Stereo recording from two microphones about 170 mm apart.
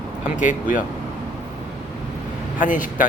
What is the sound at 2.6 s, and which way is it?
Speech, 50° left (ahead or behind).